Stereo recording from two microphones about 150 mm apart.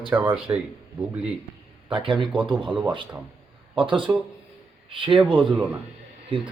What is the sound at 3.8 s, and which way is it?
Speech, 35° right (ahead or behind).